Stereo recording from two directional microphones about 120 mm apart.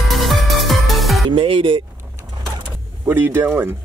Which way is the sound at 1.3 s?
45° right (ahead or behind).